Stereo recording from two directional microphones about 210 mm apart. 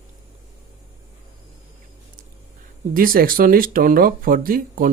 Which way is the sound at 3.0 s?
45° right (ahead or behind).